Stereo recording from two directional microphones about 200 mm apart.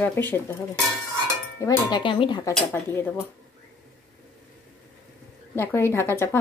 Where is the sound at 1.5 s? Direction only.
20° left (ahead or behind).